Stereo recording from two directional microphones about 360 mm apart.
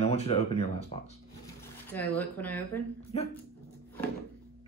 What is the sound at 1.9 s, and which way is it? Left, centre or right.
Speech, centre.